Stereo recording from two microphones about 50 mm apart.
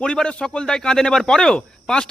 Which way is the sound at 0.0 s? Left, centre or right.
Centre.